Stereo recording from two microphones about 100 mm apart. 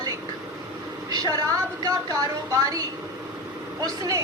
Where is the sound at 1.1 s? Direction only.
40° right (ahead or behind).